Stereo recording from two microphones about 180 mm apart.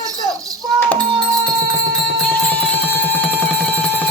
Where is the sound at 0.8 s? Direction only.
10° left (ahead or behind).